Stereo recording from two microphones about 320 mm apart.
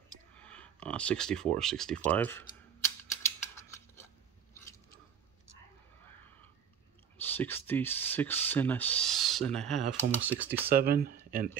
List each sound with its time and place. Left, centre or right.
0.3 s a sound: centre
7.2 s speech: centre
10.7 s speech: right